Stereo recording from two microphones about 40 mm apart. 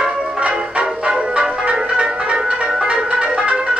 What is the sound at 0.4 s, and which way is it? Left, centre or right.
Music, right.